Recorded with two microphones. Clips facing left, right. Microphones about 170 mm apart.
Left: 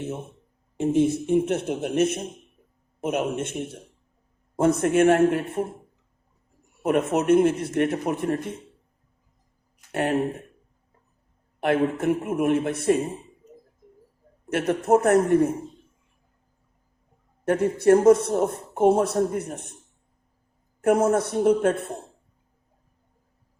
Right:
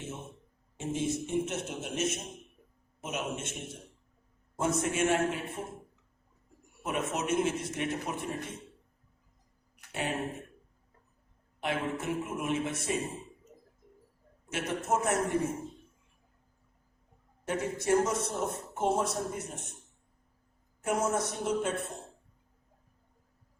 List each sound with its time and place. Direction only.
0.8 s a man's voice: 60° left (ahead or behind)
6.8 s a man's voice: 60° left (ahead or behind)
9.9 s speech: 55° left (ahead or behind)
11.6 s a man's voice: 60° left (ahead or behind)
14.5 s a man's voice: 60° left (ahead or behind)
17.4 s a man's voice: 60° left (ahead or behind)
20.8 s a man's voice: 60° left (ahead or behind)